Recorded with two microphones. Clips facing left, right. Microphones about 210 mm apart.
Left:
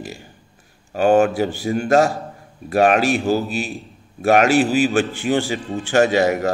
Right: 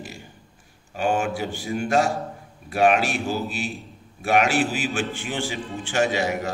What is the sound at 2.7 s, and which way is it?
A man's voice, 40° left (ahead or behind).